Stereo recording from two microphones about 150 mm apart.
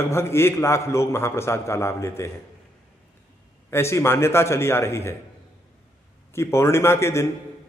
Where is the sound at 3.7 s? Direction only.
15° left (ahead or behind).